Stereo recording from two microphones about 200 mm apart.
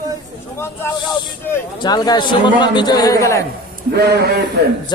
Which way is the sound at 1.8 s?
20° left (ahead or behind).